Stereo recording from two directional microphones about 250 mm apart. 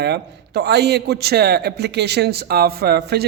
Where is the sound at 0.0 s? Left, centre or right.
Right.